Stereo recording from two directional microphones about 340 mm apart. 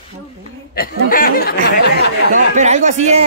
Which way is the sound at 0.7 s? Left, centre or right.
Left.